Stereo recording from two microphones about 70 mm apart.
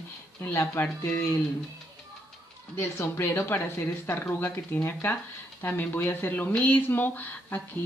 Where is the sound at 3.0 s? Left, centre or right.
Left.